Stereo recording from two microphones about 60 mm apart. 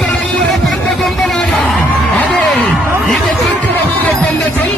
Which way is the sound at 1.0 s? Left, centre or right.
Centre.